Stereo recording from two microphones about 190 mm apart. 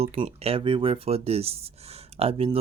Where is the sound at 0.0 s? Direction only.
35° right (ahead or behind).